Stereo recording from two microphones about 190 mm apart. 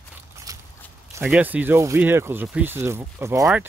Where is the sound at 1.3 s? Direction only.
5° right (ahead or behind).